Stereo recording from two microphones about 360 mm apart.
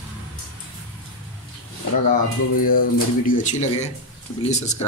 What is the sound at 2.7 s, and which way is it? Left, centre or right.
Speech, left.